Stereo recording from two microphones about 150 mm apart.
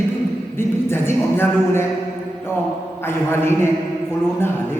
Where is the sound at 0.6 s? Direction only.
15° left (ahead or behind).